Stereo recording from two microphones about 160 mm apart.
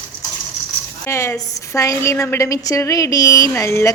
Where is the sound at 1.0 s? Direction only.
15° left (ahead or behind).